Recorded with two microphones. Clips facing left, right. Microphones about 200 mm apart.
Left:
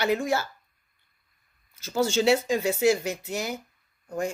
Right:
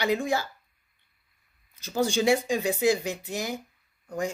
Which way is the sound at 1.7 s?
15° right (ahead or behind).